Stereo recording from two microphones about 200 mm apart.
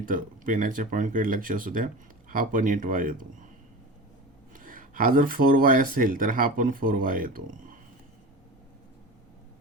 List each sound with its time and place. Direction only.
0.0 s speech: 40° right (ahead or behind)
4.5 s speech: 45° right (ahead or behind)